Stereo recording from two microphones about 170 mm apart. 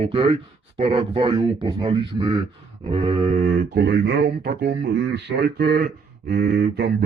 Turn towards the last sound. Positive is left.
turn(degrees=-70)  # may be behind; listen again after turning